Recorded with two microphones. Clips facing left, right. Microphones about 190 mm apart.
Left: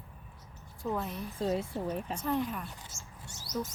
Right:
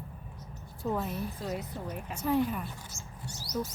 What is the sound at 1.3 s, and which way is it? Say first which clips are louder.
Speech: left 5 dB; 30° left (ahead or behind).